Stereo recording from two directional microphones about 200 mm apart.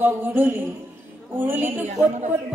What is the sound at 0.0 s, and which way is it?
A man's voice, 10° right (ahead or behind).